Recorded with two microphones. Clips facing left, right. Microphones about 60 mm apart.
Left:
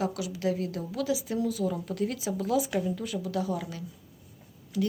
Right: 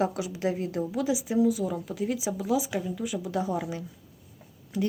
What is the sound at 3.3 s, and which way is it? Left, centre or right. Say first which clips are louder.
Speech: right 3 dB; right.